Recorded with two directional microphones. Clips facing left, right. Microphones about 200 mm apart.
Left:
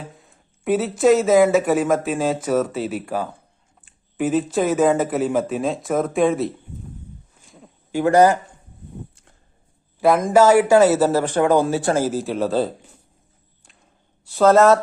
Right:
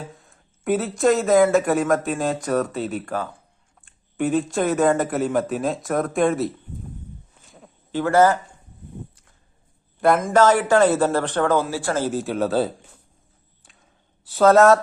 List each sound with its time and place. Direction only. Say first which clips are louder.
0.2 s speech: left 2 dB; centre (ahead or behind)
7.9 s speech: left 2 dB; 15° left (ahead or behind)
10.0 s speech: left 2 dB; centre (ahead or behind); by 12.0 s 20° left (ahead or behind)
12.0 s speech: left 1 dB; centre (ahead or behind)
14.3 s speech: even; centre (ahead or behind)